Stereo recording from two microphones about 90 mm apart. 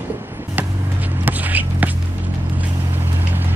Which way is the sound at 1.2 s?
20° right (ahead or behind).